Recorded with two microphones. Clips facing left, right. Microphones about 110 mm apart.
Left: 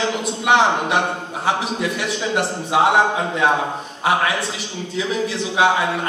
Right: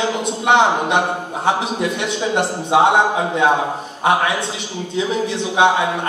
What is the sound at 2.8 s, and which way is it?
Speech, centre (ahead or behind).